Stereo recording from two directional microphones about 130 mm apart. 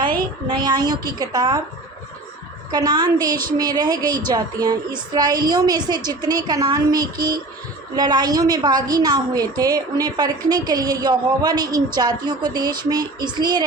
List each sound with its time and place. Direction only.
0.1 s a sound: 90° right
0.6 s a woman's voice: 30° right (ahead or behind)
2.7 s a woman's voice: 30° right (ahead or behind)